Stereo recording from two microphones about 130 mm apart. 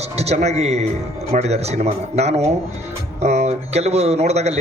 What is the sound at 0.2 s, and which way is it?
A man's voice, 55° right (ahead or behind).